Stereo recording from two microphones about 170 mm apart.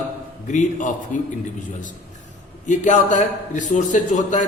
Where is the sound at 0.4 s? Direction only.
45° left (ahead or behind).